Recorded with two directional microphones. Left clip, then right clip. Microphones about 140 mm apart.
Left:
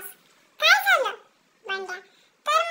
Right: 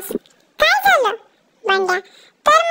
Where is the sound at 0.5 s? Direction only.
75° right (ahead or behind).